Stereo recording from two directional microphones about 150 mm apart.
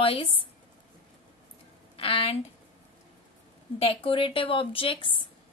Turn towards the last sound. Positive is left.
turn(degrees=35)  # may be behind; listen again after turning